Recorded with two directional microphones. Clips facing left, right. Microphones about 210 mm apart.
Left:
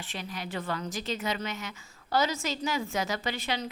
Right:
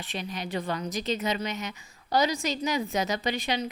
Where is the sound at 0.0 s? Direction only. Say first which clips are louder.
Right 3 dB; 20° right (ahead or behind).